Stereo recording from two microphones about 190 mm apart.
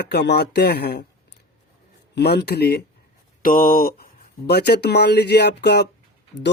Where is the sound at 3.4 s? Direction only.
45° left (ahead or behind).